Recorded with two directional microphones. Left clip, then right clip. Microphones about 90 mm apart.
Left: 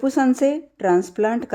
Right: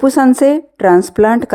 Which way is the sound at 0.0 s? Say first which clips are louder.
Right 9 dB; 55° right (ahead or behind).